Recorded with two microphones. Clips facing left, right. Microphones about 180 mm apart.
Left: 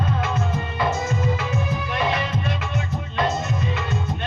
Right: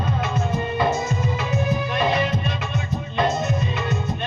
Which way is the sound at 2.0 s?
20° right (ahead or behind).